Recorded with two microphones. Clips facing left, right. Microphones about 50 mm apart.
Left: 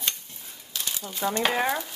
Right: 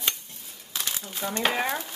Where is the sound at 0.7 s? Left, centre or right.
Right.